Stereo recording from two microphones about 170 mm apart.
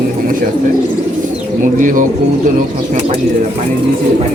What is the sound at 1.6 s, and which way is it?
Speech, 50° right (ahead or behind).